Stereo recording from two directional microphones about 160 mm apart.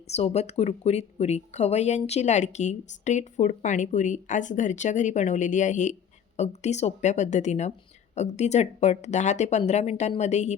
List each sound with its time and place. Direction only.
0.1 s speech: 45° left (ahead or behind)